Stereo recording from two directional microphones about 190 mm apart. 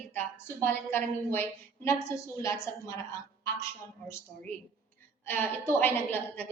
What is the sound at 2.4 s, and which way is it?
A woman's voice, 15° left (ahead or behind).